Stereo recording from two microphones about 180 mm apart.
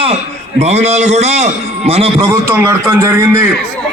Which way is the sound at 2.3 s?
15° right (ahead or behind).